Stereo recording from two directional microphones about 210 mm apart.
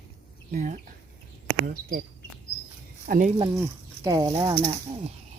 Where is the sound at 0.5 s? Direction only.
35° right (ahead or behind).